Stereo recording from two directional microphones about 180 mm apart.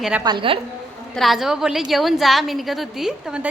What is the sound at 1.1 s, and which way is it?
A woman's voice, centre (ahead or behind).